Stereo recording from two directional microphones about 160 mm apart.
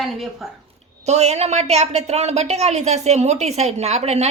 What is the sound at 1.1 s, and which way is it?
A woman's voice, 45° right (ahead or behind).